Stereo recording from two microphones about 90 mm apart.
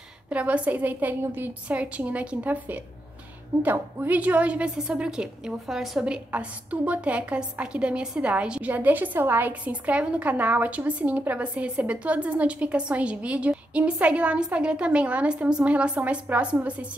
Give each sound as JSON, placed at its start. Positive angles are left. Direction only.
{"t": 0.3, "sound": "a woman's voice", "side_deg": -15}